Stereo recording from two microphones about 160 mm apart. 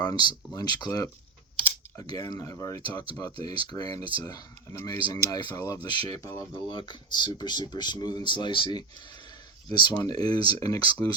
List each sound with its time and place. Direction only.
0.0 s speech: 25° left (ahead or behind)
9.9 s speech: 25° left (ahead or behind)
11.0 s speech: 10° left (ahead or behind)